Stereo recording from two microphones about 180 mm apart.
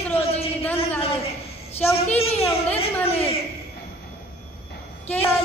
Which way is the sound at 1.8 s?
10° left (ahead or behind).